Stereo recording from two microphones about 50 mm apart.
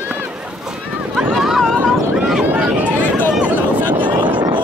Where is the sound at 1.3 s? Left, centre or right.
Centre.